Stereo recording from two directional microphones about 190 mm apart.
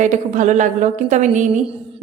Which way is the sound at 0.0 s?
40° right (ahead or behind).